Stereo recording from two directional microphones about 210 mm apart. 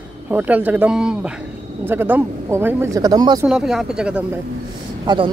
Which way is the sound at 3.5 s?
5° right (ahead or behind).